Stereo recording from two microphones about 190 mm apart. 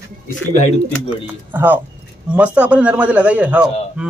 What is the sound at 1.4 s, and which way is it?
A man's voice, 10° right (ahead or behind).